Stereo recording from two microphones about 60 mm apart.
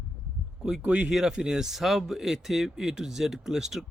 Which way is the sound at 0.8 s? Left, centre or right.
Right.